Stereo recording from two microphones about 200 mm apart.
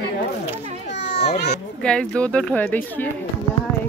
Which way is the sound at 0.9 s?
60° left (ahead or behind).